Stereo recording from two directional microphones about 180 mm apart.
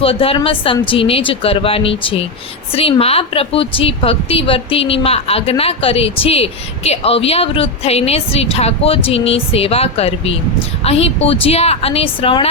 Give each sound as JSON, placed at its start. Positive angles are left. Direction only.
{"t": 0.0, "sound": "a woman's voice", "side_deg": 30}